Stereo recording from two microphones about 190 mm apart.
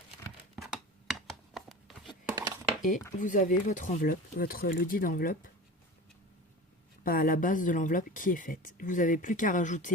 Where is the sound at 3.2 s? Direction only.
45° left (ahead or behind).